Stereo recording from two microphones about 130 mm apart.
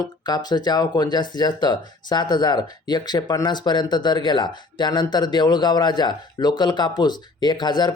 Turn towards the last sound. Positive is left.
turn(degrees=35)  # may be behind; listen again after turning